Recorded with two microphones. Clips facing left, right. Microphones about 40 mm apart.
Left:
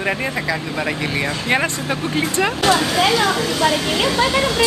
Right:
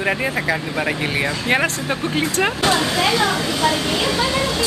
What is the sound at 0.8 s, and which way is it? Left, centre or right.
Speech, centre.